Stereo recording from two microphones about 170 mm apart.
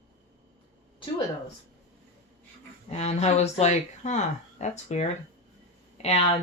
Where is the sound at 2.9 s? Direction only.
40° left (ahead or behind).